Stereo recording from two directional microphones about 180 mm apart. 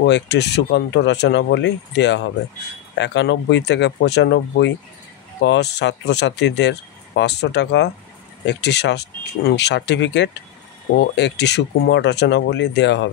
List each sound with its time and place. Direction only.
0.0 s speech: 70° left (ahead or behind)